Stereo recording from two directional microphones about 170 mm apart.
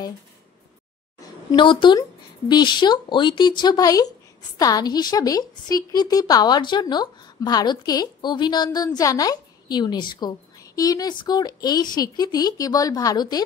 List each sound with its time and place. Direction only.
1.5 s a woman's voice: 30° left (ahead or behind)